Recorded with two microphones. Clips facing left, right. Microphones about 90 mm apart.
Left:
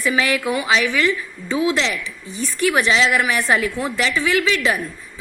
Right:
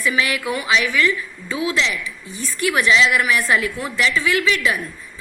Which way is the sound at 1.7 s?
45° left (ahead or behind).